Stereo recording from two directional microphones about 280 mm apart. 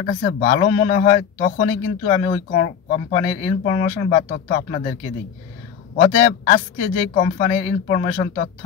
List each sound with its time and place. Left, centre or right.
0.0 s speech: left
6.0 s speech: left